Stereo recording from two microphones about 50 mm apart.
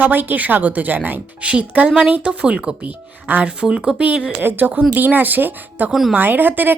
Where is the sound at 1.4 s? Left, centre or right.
Right.